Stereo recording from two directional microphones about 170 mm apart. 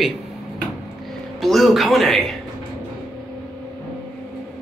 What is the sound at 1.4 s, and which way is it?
Speech, centre (ahead or behind).